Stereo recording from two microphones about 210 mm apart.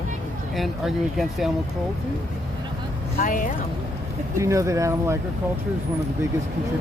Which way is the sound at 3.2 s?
40° left (ahead or behind).